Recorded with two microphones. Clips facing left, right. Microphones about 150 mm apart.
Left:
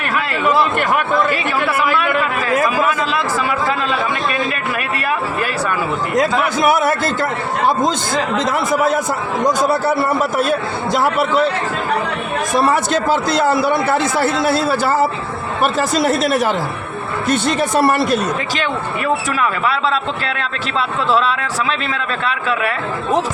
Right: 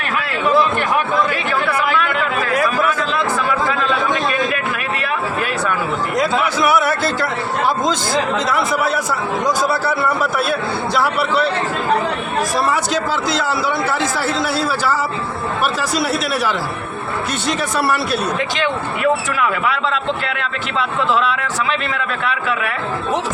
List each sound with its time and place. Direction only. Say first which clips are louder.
6.6 s music: left 2 dB; 50° left (ahead or behind)
8.5 s a man's voice: left 2 dB; 50° left (ahead or behind)
10.9 s a man's voice: left 3 dB; 45° left (ahead or behind)
12.7 s a man's voice: left 3 dB; 50° left (ahead or behind)
17.7 s a man's voice: left 5 dB; 50° left (ahead or behind)